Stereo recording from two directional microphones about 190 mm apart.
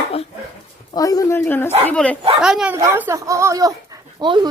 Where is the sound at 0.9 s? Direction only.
20° left (ahead or behind).